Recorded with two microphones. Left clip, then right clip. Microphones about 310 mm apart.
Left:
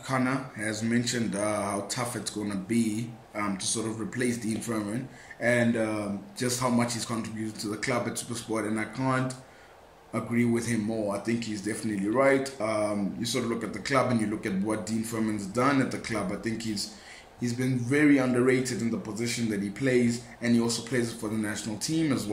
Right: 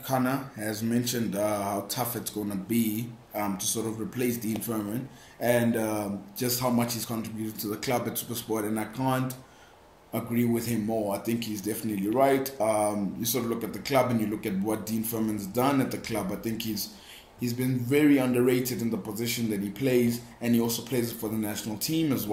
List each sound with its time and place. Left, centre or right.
0.1 s speech: centre
5.4 s a sound: centre
6.4 s speech: centre